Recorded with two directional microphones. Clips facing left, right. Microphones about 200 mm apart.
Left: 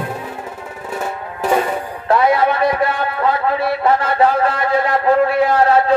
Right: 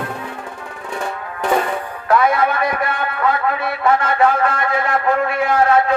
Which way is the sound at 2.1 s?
30° left (ahead or behind).